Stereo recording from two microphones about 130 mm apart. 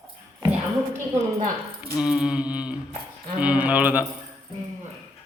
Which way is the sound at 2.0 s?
5° right (ahead or behind).